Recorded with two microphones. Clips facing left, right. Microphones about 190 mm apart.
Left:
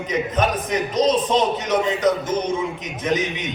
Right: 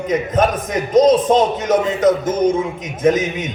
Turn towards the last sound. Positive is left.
turn(degrees=-50)  # may be behind; listen again after turning